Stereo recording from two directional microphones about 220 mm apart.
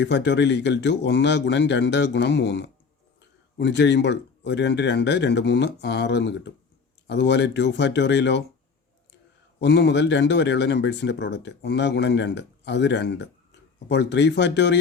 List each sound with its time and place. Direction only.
0.0 s speech: 50° left (ahead or behind)
9.6 s speech: 50° left (ahead or behind)